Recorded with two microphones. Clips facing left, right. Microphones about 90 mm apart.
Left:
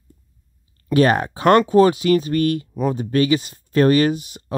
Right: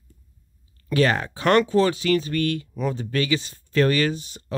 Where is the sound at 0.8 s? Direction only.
30° left (ahead or behind).